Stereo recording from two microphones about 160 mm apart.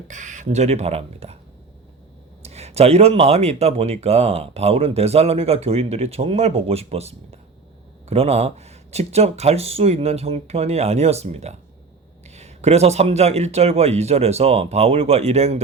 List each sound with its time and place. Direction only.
0.1 s speech: 50° right (ahead or behind)
2.4 s speech: 40° right (ahead or behind)